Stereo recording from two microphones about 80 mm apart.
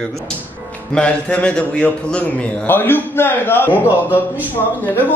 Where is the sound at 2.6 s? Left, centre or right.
Left.